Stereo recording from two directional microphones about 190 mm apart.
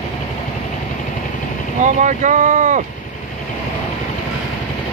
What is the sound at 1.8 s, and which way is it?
Speech, 40° right (ahead or behind).